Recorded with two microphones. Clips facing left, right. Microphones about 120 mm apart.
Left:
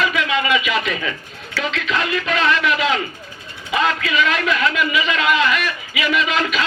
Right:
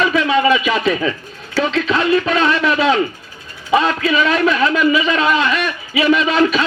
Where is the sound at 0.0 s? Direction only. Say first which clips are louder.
Right 6 dB; 35° right (ahead or behind).